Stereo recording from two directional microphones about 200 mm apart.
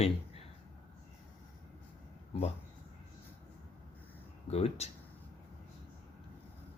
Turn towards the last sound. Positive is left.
turn(degrees=30)  # may be behind; listen again after turning